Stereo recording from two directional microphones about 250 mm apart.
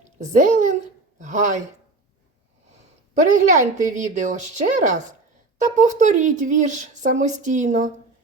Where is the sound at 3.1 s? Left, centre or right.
Right.